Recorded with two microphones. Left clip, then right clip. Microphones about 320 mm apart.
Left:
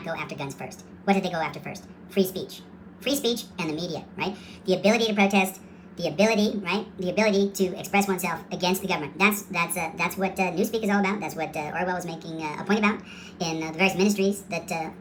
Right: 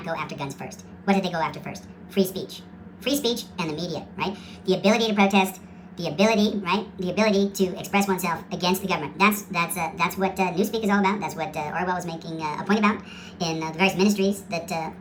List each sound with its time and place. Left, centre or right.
0.0 s a woman's voice: centre